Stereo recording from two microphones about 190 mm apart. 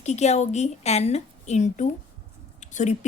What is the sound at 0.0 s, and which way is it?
A woman's voice, 35° left (ahead or behind).